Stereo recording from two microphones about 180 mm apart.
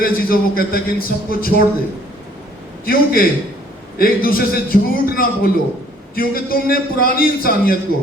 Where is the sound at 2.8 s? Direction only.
55° left (ahead or behind).